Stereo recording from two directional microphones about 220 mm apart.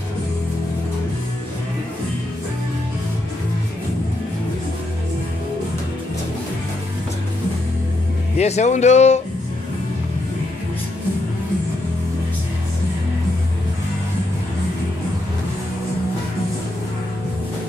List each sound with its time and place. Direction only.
8.4 s speech: 30° left (ahead or behind)